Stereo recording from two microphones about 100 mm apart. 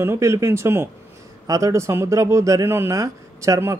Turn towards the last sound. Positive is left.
turn(degrees=-30)  # may be behind; listen again after turning